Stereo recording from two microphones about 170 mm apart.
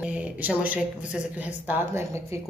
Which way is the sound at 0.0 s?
10° right (ahead or behind).